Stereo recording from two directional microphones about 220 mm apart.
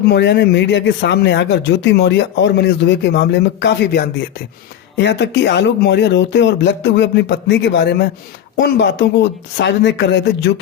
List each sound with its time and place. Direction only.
0.1 s speech: 50° left (ahead or behind)